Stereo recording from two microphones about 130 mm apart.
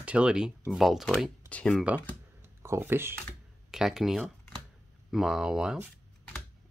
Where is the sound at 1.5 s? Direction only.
10° left (ahead or behind).